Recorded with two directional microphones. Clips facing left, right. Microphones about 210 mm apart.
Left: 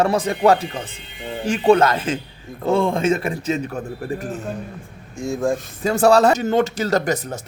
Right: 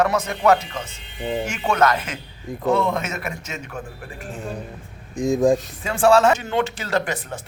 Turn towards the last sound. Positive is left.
turn(degrees=40)  # may be behind; listen again after turning